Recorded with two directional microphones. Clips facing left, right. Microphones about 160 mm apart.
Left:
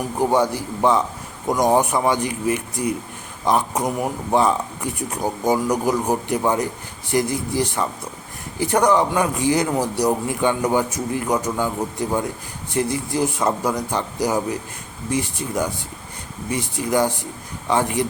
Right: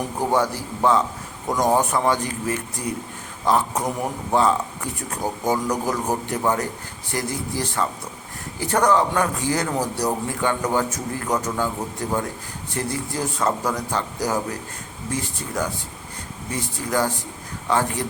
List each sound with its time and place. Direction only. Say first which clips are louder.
0.2 s speech: left 3 dB; 15° left (ahead or behind)
12.7 s speech: left 5 dB; 15° left (ahead or behind)